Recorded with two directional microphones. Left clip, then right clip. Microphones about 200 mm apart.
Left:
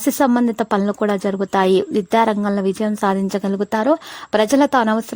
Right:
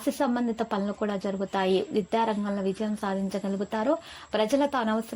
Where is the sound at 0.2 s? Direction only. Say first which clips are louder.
Left 13 dB; 50° left (ahead or behind).